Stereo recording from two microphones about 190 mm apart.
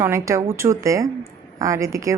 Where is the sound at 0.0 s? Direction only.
15° right (ahead or behind).